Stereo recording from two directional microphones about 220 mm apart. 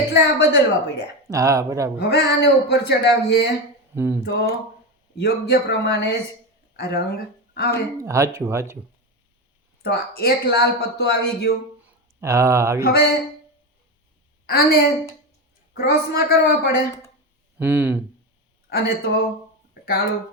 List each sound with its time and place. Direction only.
0.1 s speech: 50° left (ahead or behind)
1.3 s speech: 15° right (ahead or behind)
2.0 s speech: 50° left (ahead or behind)
3.9 s speech: 10° right (ahead or behind)
4.3 s speech: 50° left (ahead or behind)
8.0 s speech: 15° right (ahead or behind)
9.8 s speech: 45° left (ahead or behind)
12.2 s speech: 15° right (ahead or behind)
12.8 s speech: 45° left (ahead or behind)
14.4 s a woman's voice: 45° left (ahead or behind)
17.6 s speech: 5° right (ahead or behind)
18.7 s speech: 45° left (ahead or behind)